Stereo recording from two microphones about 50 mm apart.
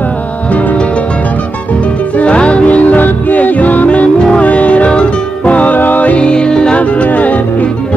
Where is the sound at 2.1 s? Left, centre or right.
Left.